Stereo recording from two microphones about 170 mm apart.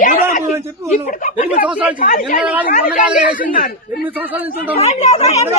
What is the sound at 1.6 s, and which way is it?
Speech, 10° right (ahead or behind).